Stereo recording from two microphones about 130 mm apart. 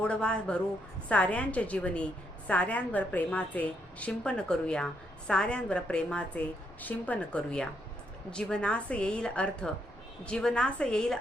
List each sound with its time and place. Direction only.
0.0 s a woman's voice: 10° left (ahead or behind)